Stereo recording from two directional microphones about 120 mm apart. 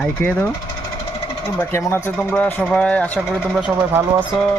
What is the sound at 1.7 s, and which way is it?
Speech, 20° left (ahead or behind).